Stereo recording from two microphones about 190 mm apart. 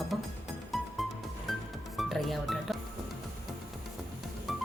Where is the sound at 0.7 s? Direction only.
Centre (ahead or behind).